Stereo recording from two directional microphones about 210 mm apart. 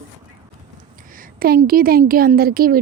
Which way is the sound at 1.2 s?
45° right (ahead or behind).